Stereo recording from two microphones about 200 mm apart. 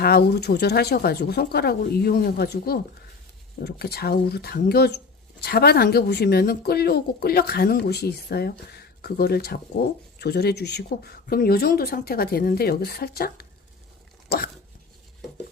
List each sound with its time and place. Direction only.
0.0 s speech: 50° left (ahead or behind)
14.3 s dog: 45° left (ahead or behind)